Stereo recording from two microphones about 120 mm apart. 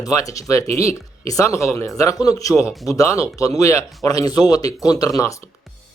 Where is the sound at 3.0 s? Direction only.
25° left (ahead or behind).